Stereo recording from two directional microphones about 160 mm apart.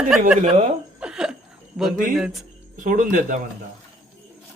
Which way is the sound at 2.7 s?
55° right (ahead or behind).